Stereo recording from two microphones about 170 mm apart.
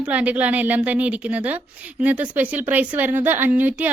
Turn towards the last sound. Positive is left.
turn(degrees=-10)  # may be behind; listen again after turning